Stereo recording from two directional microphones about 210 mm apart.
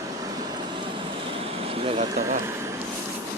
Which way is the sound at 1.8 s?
25° right (ahead or behind).